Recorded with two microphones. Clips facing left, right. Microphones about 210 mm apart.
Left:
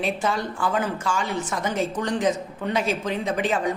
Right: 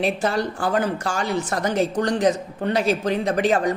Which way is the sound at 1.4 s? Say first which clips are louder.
Right 3 dB; 70° right (ahead or behind).